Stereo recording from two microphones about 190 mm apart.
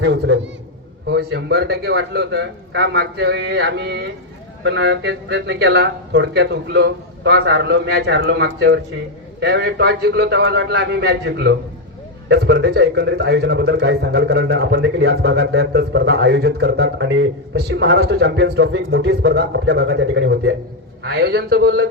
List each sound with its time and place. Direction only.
0.0 s a man's voice: 65° right (ahead or behind)